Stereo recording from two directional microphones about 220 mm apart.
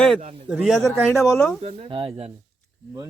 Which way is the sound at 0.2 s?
30° right (ahead or behind).